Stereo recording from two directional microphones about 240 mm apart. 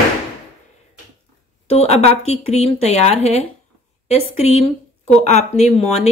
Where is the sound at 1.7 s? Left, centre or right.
Left.